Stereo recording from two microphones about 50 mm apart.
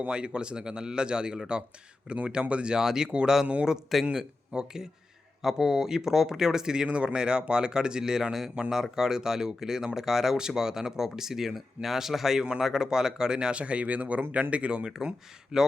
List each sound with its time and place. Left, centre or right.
0.1 s speech: centre